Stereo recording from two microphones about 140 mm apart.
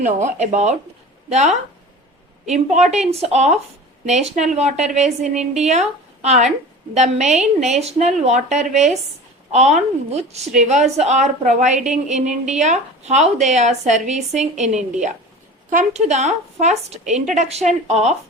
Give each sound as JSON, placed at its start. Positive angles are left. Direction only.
{"t": 0.0, "sound": "a woman's voice", "side_deg": -60}